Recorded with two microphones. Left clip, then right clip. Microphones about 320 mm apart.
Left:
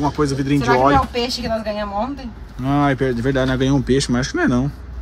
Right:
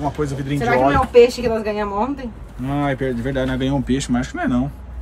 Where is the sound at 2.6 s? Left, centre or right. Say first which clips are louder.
Left 4 dB; centre.